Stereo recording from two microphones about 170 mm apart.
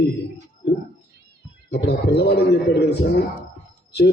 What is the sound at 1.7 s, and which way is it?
A man's voice, 75° left (ahead or behind).